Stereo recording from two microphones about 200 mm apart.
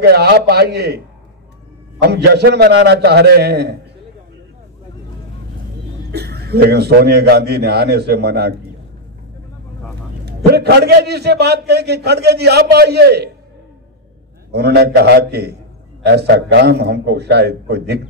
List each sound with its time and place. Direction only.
0.0 s a man's voice: 55° right (ahead or behind)
6.1 s a man's voice: 55° right (ahead or behind)
10.2 s a man's voice: 55° right (ahead or behind)
14.5 s a man's voice: 55° right (ahead or behind)